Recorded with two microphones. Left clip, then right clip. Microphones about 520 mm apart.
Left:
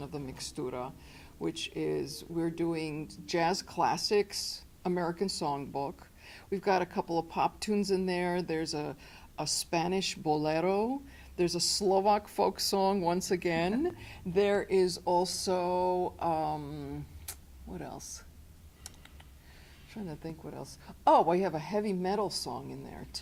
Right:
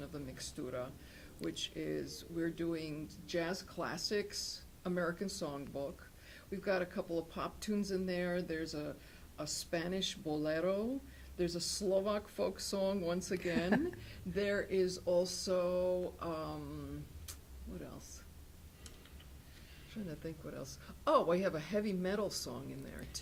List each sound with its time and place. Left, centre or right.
0.3 s speech: left
20.2 s speech: left